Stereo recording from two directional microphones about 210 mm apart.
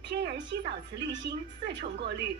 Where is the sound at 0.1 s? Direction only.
55° right (ahead or behind).